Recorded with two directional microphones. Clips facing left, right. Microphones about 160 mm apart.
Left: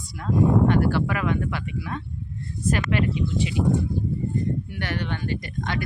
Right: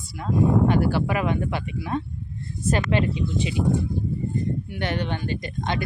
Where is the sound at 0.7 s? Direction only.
10° right (ahead or behind).